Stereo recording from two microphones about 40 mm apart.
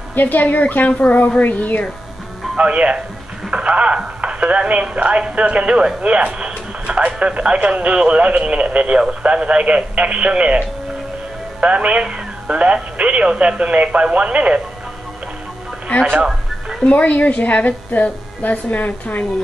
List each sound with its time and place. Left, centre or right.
0.1 s a woman's voice: left
2.5 s speech: right
11.6 s speech: right
16.9 s a woman's voice: left